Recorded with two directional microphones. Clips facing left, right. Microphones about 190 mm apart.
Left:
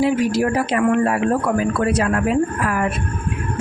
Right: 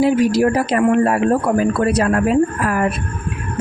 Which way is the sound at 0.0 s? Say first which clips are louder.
Right 3 dB; 35° right (ahead or behind).